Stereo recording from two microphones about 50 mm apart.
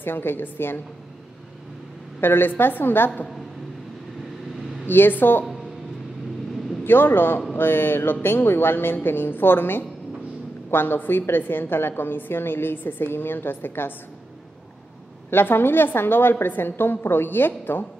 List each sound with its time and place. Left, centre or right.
0.0 s a woman's voice: left
2.1 s a woman's voice: left
4.8 s a woman's voice: left
6.8 s a woman's voice: left
15.2 s a woman's voice: left